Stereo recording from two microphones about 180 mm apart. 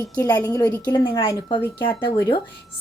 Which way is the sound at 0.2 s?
20° left (ahead or behind).